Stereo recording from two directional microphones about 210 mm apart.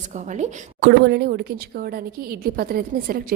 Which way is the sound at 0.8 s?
50° right (ahead or behind).